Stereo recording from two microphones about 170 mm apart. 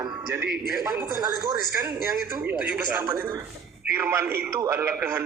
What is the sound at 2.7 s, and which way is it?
A man's voice, 10° right (ahead or behind).